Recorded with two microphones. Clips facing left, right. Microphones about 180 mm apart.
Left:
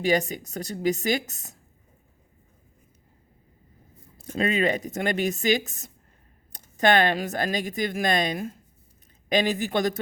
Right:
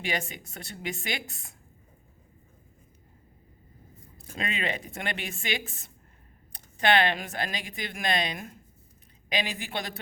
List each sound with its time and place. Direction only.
0.0 s a woman's voice: 40° left (ahead or behind)
4.4 s a woman's voice: 40° left (ahead or behind)